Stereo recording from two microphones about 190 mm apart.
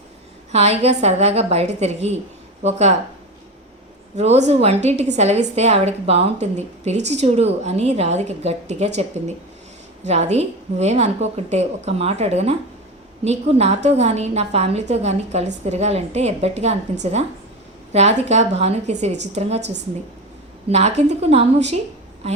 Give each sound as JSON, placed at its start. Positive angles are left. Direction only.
{"t": 0.5, "sound": "a woman's voice", "side_deg": -35}
{"t": 4.1, "sound": "a woman's voice", "side_deg": -35}
{"t": 19.1, "sound": "a woman's voice", "side_deg": -65}
{"t": 19.4, "sound": "a woman's voice", "side_deg": -35}
{"t": 20.7, "sound": "a woman's voice", "side_deg": -35}